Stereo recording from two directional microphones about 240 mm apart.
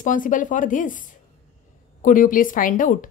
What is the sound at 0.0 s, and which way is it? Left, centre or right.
Speech, left.